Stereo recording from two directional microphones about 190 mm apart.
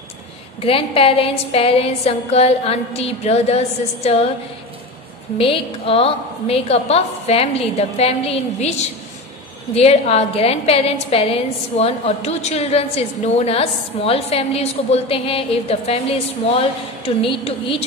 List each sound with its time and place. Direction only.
0.6 s a woman's voice: 30° left (ahead or behind)
5.4 s a woman's voice: 30° left (ahead or behind)